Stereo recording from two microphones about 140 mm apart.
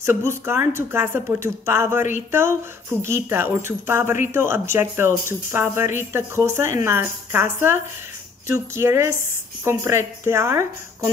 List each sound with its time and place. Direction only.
0.0 s speech: 20° right (ahead or behind)
3.1 s a woman's voice: 15° right (ahead or behind)